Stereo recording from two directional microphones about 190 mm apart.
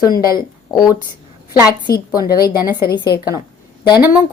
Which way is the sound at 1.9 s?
55° left (ahead or behind).